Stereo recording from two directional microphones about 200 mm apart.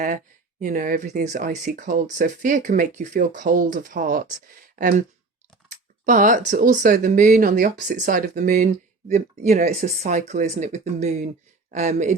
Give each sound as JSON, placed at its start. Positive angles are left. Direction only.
{"t": 0.6, "sound": "speech", "side_deg": -45}
{"t": 6.1, "sound": "speech", "side_deg": -40}